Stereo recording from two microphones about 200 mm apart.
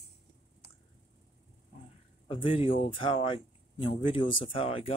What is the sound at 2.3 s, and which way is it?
Speech, 25° left (ahead or behind).